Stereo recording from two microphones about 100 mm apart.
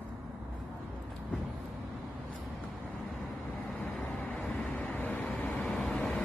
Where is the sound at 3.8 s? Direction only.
10° left (ahead or behind).